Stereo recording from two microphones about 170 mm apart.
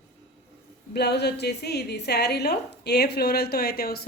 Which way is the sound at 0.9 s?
80° left.